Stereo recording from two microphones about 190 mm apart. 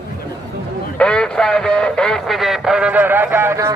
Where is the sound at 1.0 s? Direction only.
5° left (ahead or behind).